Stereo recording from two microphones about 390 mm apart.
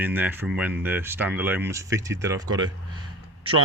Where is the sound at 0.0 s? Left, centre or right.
Centre.